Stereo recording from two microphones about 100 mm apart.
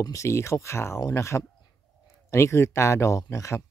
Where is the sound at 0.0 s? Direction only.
30° left (ahead or behind).